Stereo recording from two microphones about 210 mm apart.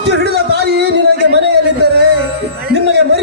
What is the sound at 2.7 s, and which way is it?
Music, 50° right (ahead or behind).